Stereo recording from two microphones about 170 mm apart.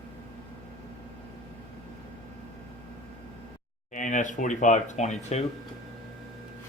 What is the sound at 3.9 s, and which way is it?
Speech, 45° left (ahead or behind).